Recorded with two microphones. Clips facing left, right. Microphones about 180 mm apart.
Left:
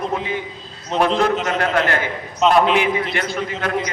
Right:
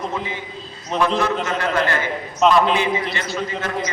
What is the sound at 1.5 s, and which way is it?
Speech, 65° left (ahead or behind).